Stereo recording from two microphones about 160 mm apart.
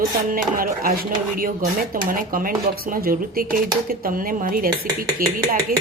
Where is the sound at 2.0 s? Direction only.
60° right (ahead or behind).